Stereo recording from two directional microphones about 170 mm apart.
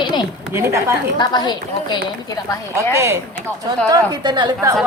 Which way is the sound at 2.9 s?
15° right (ahead or behind).